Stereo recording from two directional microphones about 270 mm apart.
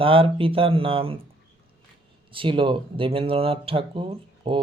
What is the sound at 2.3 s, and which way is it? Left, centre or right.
Speech, centre.